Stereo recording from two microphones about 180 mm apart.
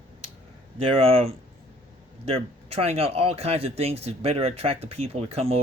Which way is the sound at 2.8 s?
35° right (ahead or behind).